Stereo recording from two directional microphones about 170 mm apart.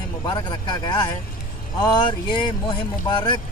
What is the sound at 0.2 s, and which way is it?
Speech, 25° left (ahead or behind).